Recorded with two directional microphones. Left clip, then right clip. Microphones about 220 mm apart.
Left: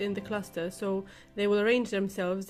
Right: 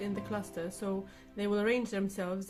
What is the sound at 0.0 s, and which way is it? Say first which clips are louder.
Speech: left 5 dB; 35° left (ahead or behind).